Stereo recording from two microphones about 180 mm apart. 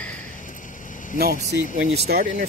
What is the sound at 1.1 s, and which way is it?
Speech, 60° right (ahead or behind).